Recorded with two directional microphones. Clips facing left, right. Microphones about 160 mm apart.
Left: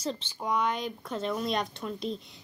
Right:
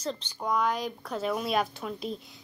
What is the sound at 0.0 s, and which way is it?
Speech, 5° left (ahead or behind).